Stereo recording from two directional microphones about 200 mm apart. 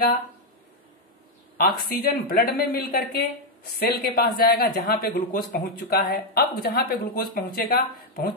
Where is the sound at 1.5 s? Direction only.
50° left (ahead or behind).